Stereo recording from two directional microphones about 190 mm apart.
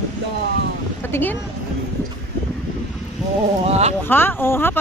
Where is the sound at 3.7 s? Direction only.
35° right (ahead or behind).